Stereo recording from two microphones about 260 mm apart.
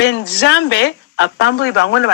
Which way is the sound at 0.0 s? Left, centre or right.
Left.